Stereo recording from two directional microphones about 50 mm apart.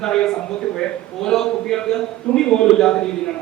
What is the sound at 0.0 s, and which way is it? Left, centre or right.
A man's voice, centre.